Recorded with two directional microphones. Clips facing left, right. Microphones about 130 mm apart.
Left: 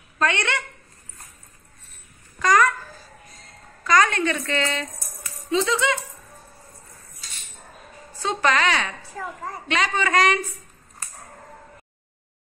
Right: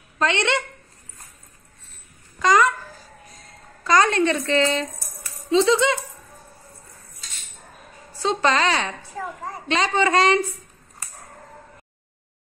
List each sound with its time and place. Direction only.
0.2 s a woman's voice: 25° right (ahead or behind)
2.4 s a woman's voice: 20° right (ahead or behind)
3.8 s a woman's voice: 30° right (ahead or behind)
8.2 s a woman's voice: 30° right (ahead or behind)